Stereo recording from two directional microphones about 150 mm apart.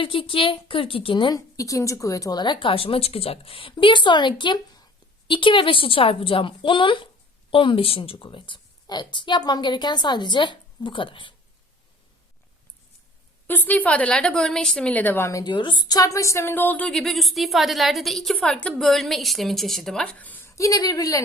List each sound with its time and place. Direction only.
0.0 s a woman's voice: 35° left (ahead or behind)
1.4 s a woman's voice: 20° left (ahead or behind)
13.5 s a woman's voice: 10° left (ahead or behind)